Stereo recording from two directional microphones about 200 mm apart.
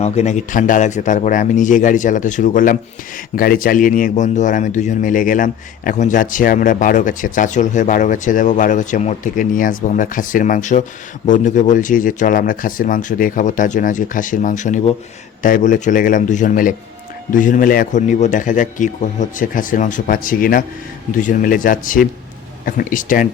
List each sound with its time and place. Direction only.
0.0 s speech: 35° left (ahead or behind)